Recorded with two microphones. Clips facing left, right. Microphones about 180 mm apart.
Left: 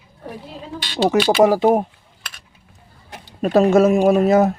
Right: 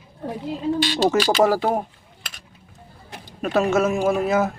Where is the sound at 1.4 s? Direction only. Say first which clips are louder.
Left 7 dB; 20° left (ahead or behind).